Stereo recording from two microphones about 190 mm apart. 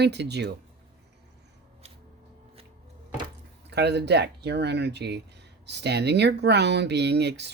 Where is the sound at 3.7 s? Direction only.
60° right (ahead or behind).